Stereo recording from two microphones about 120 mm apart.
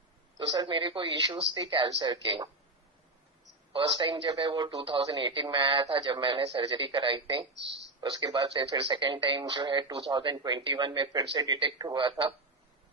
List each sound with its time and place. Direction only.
0.6 s speech: 40° right (ahead or behind)
3.7 s speech: 45° right (ahead or behind)